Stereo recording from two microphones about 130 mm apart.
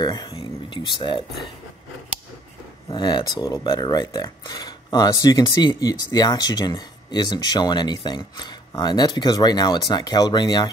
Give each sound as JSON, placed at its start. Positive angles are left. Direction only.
{"t": 0.0, "sound": "a sound", "side_deg": 30}
{"t": 0.4, "sound": "speech", "side_deg": 40}
{"t": 2.9, "sound": "speech", "side_deg": 35}